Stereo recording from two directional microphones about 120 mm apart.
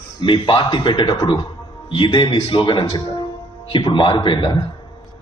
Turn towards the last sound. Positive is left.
turn(degrees=40)  # may be behind; listen again after turning